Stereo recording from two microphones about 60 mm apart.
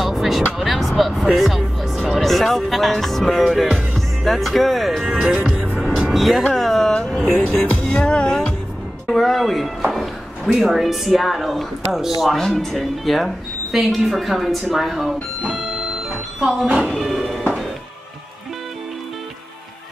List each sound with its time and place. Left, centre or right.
0.0 s music: centre
2.1 s speech: centre
5.2 s music: centre
6.0 s vehicle: centre
6.5 s a sound: centre
6.9 s music: centre
7.3 s speech: left
8.0 s music: centre
9.1 s speech: centre
16.3 s speech: centre
16.6 s speech: centre
17.0 s music: centre